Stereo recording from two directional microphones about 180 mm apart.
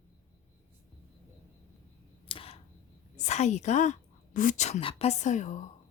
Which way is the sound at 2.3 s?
30° left (ahead or behind).